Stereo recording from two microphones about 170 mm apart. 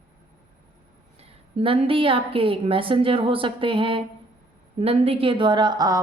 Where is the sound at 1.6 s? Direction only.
35° right (ahead or behind).